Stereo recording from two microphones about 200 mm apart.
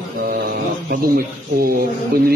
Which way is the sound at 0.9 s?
50° right (ahead or behind).